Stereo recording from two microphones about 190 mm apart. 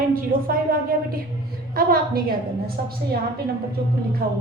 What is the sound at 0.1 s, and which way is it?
A woman's voice, 50° right (ahead or behind).